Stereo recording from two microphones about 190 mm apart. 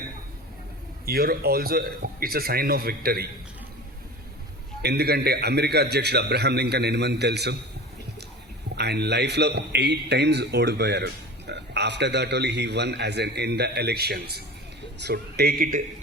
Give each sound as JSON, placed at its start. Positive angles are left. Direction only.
{"t": 1.0, "sound": "a man's voice", "side_deg": -55}
{"t": 4.8, "sound": "a man's voice", "side_deg": -55}
{"t": 8.7, "sound": "a man's voice", "side_deg": -60}